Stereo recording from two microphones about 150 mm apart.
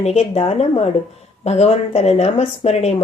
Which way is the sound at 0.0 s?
45° left (ahead or behind).